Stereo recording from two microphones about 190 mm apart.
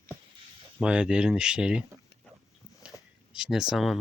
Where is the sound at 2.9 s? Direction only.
15° left (ahead or behind).